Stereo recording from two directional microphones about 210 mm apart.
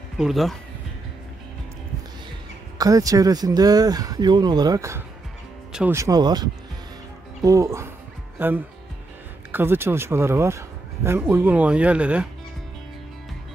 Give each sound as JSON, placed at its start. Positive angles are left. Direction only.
{"t": 0.2, "sound": "speech", "side_deg": 0}
{"t": 2.8, "sound": "speech", "side_deg": -15}